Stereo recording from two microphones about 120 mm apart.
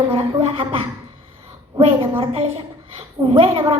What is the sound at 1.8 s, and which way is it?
A woman's voice, 55° right (ahead or behind).